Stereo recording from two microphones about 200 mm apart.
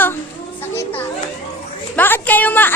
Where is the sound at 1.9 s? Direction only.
10° left (ahead or behind).